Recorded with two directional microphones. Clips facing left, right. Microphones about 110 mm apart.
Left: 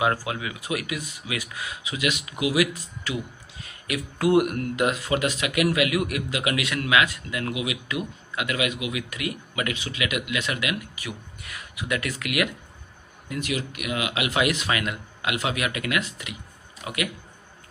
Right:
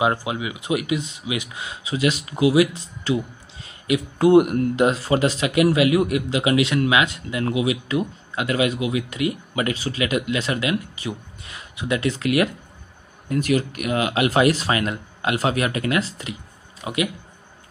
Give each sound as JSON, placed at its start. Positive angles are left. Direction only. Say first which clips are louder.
{"t": 0.0, "sound": "speech", "louder": "right 3 dB", "side_deg": -20}
{"t": 13.3, "sound": "speech", "louder": "right 8 dB", "side_deg": -40}